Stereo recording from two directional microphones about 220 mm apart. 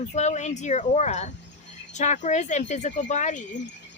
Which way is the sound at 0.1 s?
30° left (ahead or behind).